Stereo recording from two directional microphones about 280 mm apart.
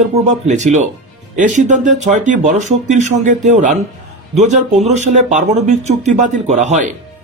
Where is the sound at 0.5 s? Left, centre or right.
Right.